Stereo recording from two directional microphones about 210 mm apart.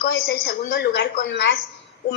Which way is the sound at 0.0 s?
55° left (ahead or behind).